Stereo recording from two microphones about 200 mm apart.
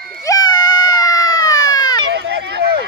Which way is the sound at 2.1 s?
55° right (ahead or behind).